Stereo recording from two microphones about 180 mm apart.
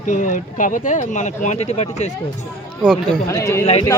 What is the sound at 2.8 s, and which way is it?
Speech, 5° left (ahead or behind).